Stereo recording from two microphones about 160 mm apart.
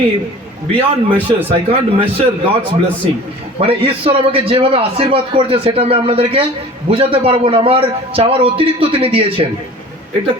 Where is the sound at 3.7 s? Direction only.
35° right (ahead or behind).